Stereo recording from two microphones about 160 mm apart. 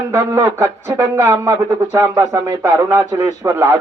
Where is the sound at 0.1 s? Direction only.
20° right (ahead or behind).